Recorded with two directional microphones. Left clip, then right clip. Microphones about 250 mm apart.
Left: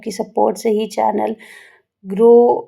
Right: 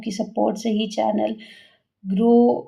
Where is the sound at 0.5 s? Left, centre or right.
Left.